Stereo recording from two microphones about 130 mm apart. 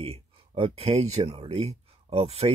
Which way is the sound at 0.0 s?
50° right (ahead or behind).